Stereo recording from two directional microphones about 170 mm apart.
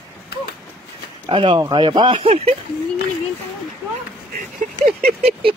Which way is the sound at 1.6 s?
25° right (ahead or behind).